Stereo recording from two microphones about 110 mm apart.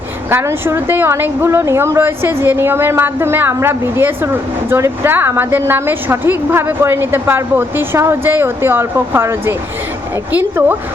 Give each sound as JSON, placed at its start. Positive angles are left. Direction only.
{"t": 0.3, "sound": "a woman's voice", "side_deg": -20}